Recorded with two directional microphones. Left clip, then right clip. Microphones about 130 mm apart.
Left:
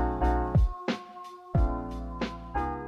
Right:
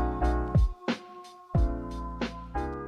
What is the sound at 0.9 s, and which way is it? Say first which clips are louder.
Music: even; centre (ahead or behind).